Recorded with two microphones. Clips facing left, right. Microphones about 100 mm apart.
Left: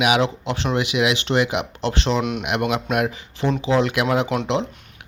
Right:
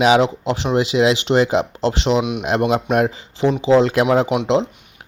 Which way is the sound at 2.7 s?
30° right (ahead or behind).